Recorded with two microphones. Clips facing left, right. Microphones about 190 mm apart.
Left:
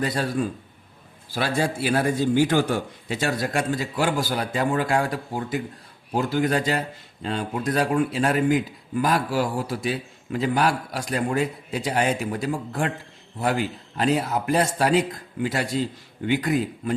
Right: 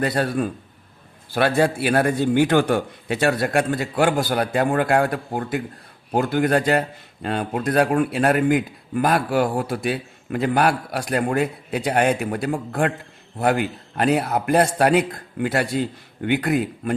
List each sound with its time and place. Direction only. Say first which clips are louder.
0.0 s a man's voice: right 3 dB; 60° right (ahead or behind)